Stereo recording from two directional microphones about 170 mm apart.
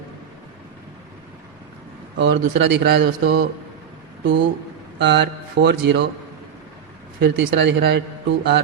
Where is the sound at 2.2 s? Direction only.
90° right.